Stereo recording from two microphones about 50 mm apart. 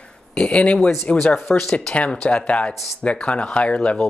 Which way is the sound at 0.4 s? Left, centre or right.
Left.